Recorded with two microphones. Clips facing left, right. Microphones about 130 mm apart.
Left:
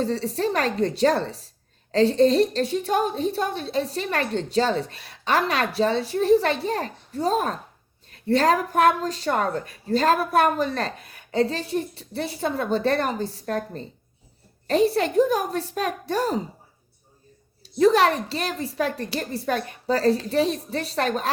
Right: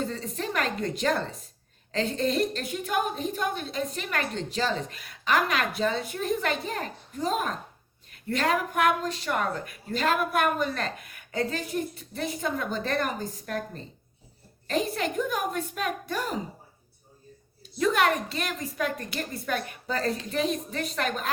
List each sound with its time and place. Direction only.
0.0 s a woman's voice: 35° left (ahead or behind)
17.6 s a woman's voice: 35° left (ahead or behind)